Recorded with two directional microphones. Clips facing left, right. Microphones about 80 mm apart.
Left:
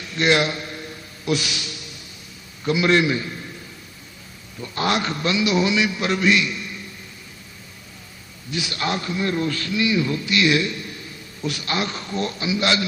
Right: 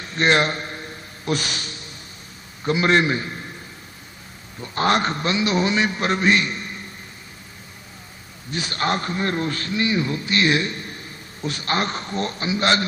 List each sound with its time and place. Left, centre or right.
0.0 s a sound: right
2.6 s a man's voice: right
4.6 s a man's voice: right
8.4 s a man's voice: right